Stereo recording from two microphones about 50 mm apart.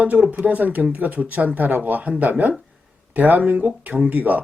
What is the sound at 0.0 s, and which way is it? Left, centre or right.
Speech, right.